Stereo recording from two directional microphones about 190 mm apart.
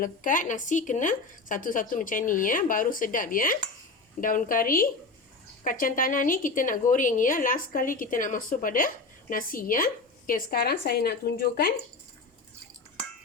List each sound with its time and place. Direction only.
0.0 s a woman's voice: 45° left (ahead or behind)